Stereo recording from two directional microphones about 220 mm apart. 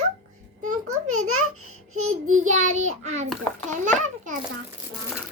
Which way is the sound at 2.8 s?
30° right (ahead or behind).